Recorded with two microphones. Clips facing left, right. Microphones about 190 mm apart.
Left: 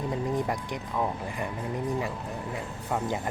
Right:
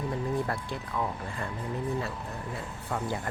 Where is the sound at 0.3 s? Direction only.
15° left (ahead or behind).